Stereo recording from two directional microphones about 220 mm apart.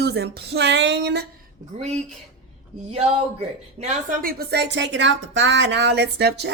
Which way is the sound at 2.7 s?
30° right (ahead or behind).